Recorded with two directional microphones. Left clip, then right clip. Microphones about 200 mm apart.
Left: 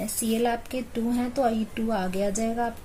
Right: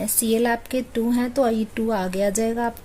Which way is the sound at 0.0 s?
55° right (ahead or behind).